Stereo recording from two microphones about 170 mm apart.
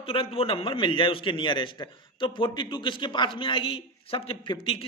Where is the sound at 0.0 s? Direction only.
35° left (ahead or behind).